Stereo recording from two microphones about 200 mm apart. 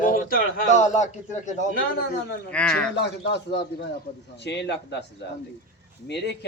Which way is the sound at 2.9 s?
60° left (ahead or behind).